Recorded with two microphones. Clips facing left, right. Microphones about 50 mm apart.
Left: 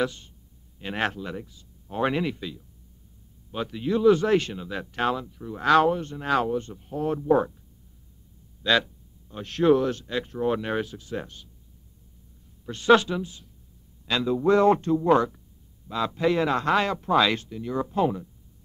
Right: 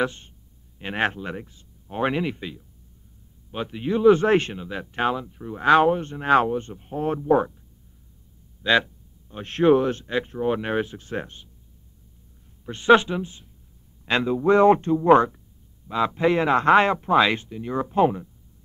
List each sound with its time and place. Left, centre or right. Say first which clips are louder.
0.0 s speech: right 2 dB; right
1.9 s speech: right 1 dB; centre; by 4.6 s right
4.6 s speech: right 2 dB; centre; by 7.2 s right
8.6 s a sound: right 2 dB; right
9.4 s speech: right 2 dB; right
12.6 s speech: right 2 dB; right